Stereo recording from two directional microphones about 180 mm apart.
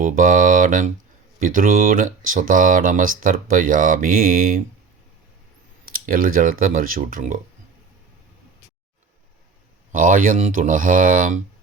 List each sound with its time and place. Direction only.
0.0 s speech: 50° right (ahead or behind)
5.9 s speech: 50° right (ahead or behind)
9.9 s speech: 50° right (ahead or behind)